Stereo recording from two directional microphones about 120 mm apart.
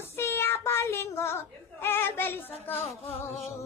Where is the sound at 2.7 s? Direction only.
15° left (ahead or behind).